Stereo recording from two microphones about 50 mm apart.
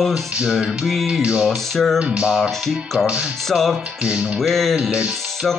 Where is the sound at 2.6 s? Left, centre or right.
Centre.